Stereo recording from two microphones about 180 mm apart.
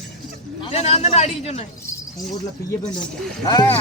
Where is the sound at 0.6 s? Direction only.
35° left (ahead or behind).